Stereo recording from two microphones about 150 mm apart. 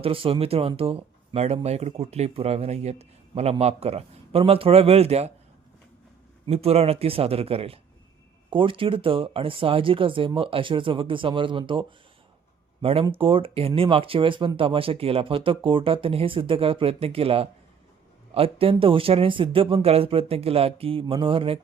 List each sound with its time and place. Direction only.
0.0 s speech: 40° right (ahead or behind)
6.4 s speech: 40° right (ahead or behind)